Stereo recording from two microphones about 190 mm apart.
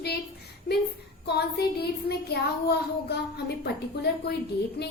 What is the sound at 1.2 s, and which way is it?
Speech, 60° left (ahead or behind).